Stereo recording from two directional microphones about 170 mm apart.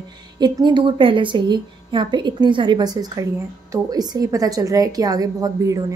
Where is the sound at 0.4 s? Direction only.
25° right (ahead or behind).